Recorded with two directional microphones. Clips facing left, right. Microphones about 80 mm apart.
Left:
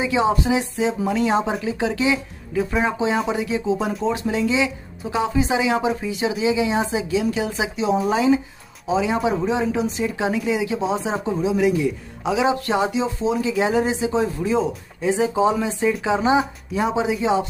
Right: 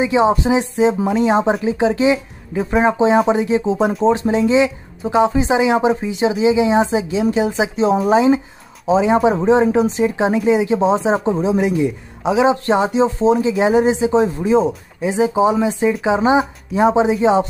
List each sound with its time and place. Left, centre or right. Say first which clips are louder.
0.0 s speech: right 5 dB; right